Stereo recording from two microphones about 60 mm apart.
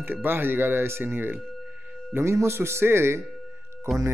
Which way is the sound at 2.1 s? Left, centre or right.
Right.